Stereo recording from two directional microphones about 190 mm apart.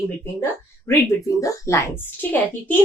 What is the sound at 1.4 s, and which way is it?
A woman's voice, 15° left (ahead or behind).